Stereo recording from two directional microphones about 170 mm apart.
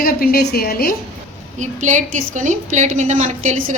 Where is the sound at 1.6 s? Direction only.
45° right (ahead or behind).